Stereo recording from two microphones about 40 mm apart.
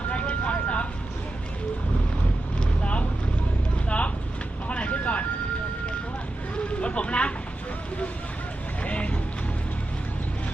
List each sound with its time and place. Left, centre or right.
0.1 s vehicle: left
2.6 s vehicle: left
3.8 s a sound: left
4.7 s vehicle: left
6.7 s vehicle: left
8.8 s run: left